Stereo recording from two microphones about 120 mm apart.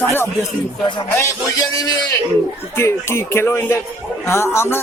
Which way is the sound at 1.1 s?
25° left (ahead or behind).